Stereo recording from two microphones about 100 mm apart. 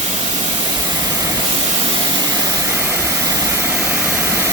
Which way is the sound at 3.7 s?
15° right (ahead or behind).